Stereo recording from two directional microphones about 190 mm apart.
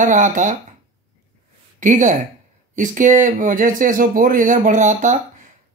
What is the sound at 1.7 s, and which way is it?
Speech, 40° right (ahead or behind).